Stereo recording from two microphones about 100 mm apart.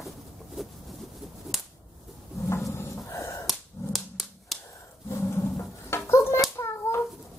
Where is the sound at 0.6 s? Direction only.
5° right (ahead or behind).